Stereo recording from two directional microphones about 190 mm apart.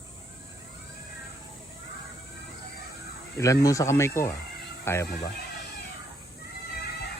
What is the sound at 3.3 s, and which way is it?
Speech, 15° left (ahead or behind).